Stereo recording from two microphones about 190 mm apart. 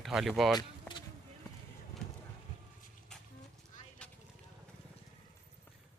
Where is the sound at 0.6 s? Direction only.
25° left (ahead or behind).